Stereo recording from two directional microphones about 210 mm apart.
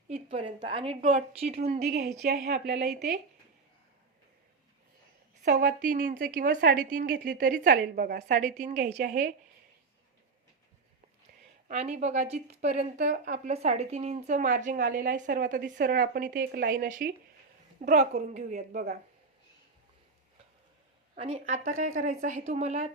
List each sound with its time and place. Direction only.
0.1 s a woman's voice: 25° right (ahead or behind)
1.7 s a woman's voice: 50° right (ahead or behind)
5.5 s speech: 45° right (ahead or behind)
11.7 s speech: 30° right (ahead or behind)
21.2 s speech: 30° right (ahead or behind)